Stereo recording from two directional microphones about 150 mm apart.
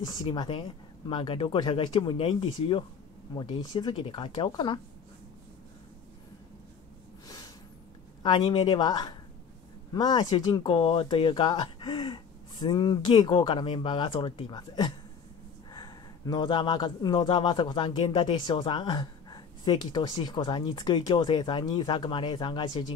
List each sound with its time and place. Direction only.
0.0 s a man's voice: 35° left (ahead or behind)
7.2 s snort: 25° left (ahead or behind)
8.2 s a man's voice: 35° left (ahead or behind)